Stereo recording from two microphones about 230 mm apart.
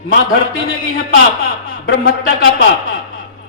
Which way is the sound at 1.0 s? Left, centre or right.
Left.